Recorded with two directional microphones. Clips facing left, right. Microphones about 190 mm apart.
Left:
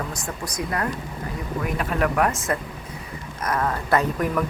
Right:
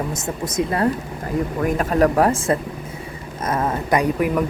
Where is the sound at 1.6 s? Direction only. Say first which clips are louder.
Right 6 dB; 40° right (ahead or behind).